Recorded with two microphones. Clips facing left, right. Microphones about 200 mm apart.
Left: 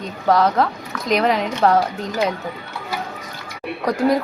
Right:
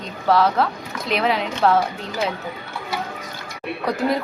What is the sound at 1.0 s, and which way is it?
Speech, 40° left (ahead or behind).